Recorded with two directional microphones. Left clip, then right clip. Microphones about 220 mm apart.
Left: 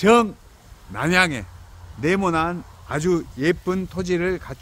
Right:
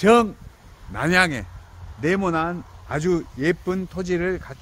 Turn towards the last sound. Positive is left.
turn(degrees=15)  # may be behind; listen again after turning